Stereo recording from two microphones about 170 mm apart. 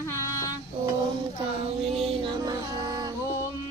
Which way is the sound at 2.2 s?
25° right (ahead or behind).